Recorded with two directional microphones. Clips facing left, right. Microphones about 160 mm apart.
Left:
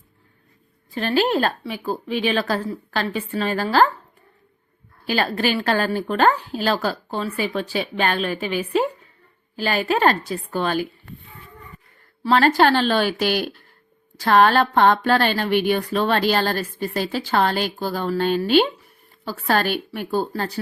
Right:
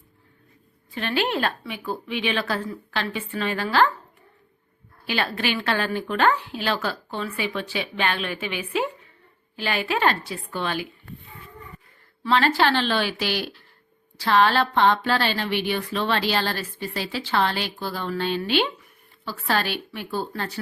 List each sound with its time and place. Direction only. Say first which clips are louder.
0.9 s a woman's voice: left 5 dB; 40° left (ahead or behind)
5.0 s a woman's voice: left 4 dB; 40° left (ahead or behind)
12.2 s speech: left 4 dB; 45° left (ahead or behind)